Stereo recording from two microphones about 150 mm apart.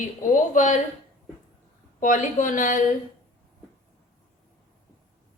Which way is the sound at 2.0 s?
55° left (ahead or behind).